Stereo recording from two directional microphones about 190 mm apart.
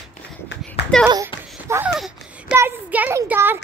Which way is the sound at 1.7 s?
5° right (ahead or behind).